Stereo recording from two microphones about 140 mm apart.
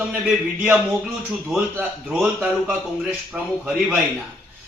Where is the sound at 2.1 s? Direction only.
5° right (ahead or behind).